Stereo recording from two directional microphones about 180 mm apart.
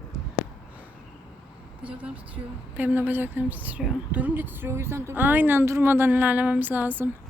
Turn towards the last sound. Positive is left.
turn(degrees=-10)  # may be behind; listen again after turning